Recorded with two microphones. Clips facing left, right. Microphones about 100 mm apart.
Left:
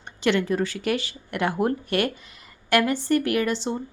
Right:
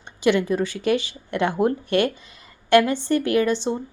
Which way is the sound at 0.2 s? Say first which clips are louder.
Right 3 dB; 15° right (ahead or behind).